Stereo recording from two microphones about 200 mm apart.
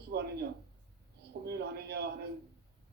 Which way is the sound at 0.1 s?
50° right (ahead or behind).